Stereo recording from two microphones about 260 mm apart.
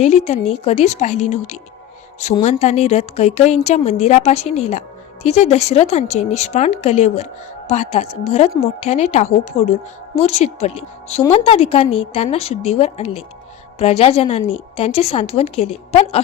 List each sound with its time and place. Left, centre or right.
0.0 s a woman's voice: left